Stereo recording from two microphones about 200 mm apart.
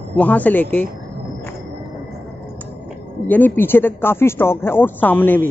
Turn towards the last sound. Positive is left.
turn(degrees=10)  # may be behind; listen again after turning